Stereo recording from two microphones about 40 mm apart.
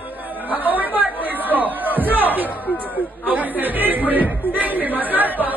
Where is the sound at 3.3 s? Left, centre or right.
Right.